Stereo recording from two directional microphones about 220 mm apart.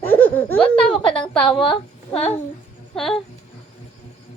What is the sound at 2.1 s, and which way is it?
Babbling, 5° left (ahead or behind).